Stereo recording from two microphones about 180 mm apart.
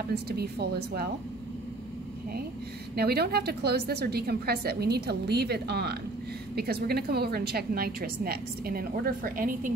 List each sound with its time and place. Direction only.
0.1 s a woman's voice: 60° right (ahead or behind)
3.0 s a woman's voice: 60° right (ahead or behind)